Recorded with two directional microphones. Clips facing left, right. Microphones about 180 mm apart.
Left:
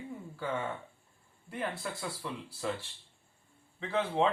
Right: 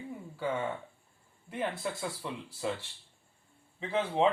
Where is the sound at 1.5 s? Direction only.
20° right (ahead or behind).